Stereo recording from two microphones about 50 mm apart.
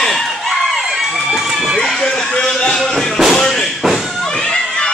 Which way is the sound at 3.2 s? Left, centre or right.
Centre.